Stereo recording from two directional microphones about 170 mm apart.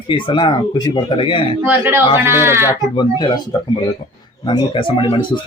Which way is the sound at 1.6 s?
10° right (ahead or behind).